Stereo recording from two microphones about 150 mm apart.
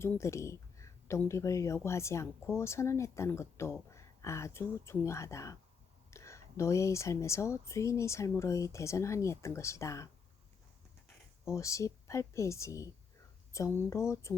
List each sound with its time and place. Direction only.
0.0 s speech: 20° left (ahead or behind)
11.4 s speech: 20° left (ahead or behind)